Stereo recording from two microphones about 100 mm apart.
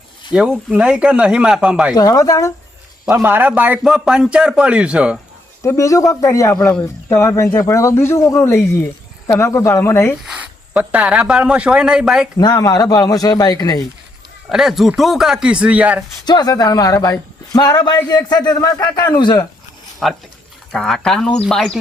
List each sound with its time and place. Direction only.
0.3 s speech: 10° right (ahead or behind)
2.0 s speech: 35° left (ahead or behind)
3.2 s speech: 20° right (ahead or behind)
5.6 s speech: 30° left (ahead or behind)
10.2 s speech: 10° right (ahead or behind)
12.4 s speech: 40° left (ahead or behind)
14.5 s speech: 5° right (ahead or behind)
16.2 s a man's voice: 45° left (ahead or behind)
20.0 s speech: 5° left (ahead or behind)